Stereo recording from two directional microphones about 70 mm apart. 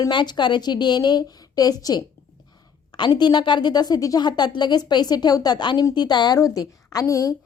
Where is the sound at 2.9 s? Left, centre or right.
Left.